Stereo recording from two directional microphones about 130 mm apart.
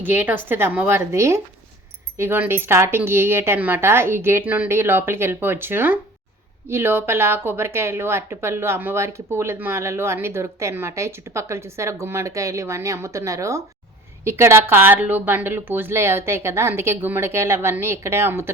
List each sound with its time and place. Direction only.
0.0 s a woman's voice: 15° right (ahead or behind)